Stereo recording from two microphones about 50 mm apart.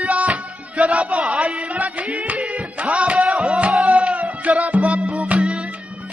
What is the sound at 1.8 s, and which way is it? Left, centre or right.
Music, right.